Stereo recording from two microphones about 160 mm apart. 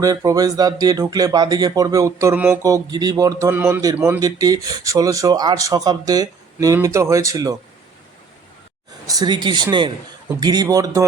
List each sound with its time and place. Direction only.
0.0 s speech: 20° right (ahead or behind)
4.2 s speech: 20° right (ahead or behind)
9.0 s speech: 25° right (ahead or behind)